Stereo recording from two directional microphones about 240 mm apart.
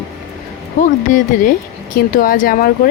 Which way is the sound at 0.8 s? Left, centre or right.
Left.